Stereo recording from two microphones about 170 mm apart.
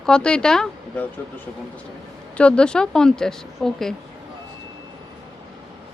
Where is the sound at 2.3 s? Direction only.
5° left (ahead or behind).